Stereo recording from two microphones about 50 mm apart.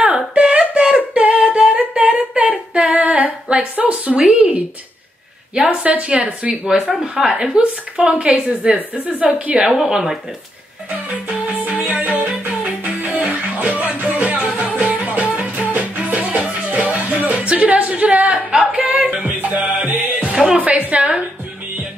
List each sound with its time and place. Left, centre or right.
0.0 s humming: right
2.5 s female singing: centre
2.9 s female singing: right
3.8 s speech: right
7.0 s speech: centre
7.4 s a woman's voice: centre
9.0 s speech: right
9.7 s a woman's voice: centre
11.2 s music: right